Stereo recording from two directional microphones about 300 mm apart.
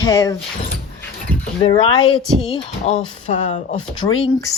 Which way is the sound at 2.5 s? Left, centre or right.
Left.